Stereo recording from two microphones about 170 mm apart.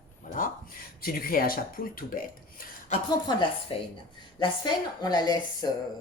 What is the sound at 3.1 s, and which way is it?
A woman's voice, 25° left (ahead or behind).